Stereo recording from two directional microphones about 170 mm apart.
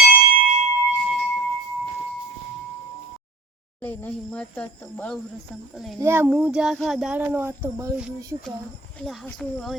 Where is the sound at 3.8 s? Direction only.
10° left (ahead or behind).